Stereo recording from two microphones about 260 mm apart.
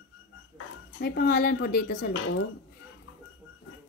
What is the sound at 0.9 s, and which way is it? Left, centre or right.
Speech, left.